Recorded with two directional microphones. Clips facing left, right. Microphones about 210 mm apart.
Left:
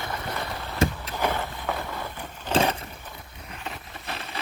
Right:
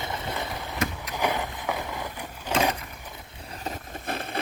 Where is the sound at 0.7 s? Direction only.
30° left (ahead or behind).